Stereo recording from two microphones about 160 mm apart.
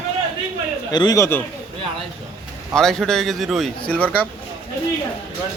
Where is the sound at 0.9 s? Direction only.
25° left (ahead or behind).